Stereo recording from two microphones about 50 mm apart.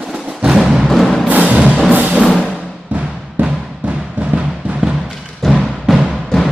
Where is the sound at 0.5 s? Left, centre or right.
Centre.